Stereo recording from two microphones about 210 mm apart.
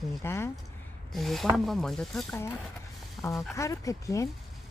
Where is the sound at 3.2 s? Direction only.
15° left (ahead or behind).